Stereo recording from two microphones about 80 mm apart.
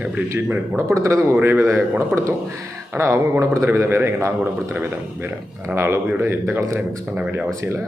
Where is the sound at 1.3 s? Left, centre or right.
Right.